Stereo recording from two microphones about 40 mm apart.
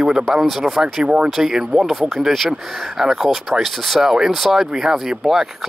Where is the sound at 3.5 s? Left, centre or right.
Centre.